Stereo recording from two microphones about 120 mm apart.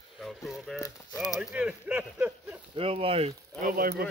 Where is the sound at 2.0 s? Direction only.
20° right (ahead or behind).